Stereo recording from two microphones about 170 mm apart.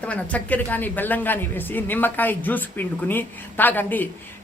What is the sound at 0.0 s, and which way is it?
Speech, 10° left (ahead or behind).